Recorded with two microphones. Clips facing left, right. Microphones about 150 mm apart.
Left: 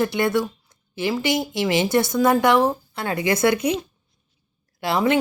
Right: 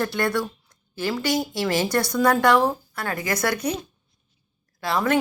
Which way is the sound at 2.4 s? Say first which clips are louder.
Left 1 dB; 20° left (ahead or behind).